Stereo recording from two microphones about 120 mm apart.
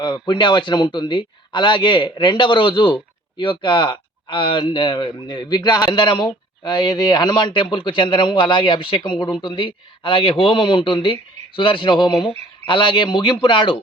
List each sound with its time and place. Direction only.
0.0 s speech: 40° left (ahead or behind)